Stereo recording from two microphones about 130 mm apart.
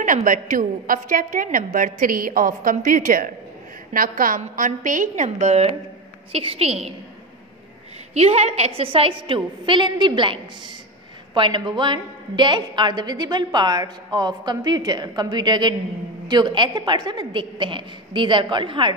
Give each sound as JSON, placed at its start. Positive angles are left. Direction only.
{"t": 0.0, "sound": "a woman's voice", "side_deg": -85}
{"t": 8.1, "sound": "a woman's voice", "side_deg": -55}